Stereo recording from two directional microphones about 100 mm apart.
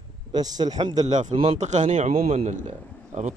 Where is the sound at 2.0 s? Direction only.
90° right.